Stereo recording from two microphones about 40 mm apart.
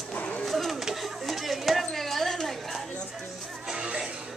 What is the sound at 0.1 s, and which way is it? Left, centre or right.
Bird, left.